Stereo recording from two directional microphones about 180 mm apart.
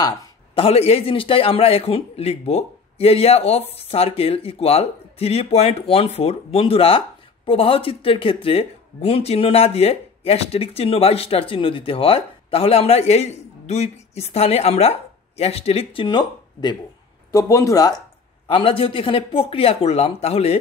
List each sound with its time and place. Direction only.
0.6 s speech: 35° left (ahead or behind)
18.5 s speech: 30° left (ahead or behind)